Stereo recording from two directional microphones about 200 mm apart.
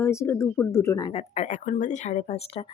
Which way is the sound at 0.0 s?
15° left (ahead or behind).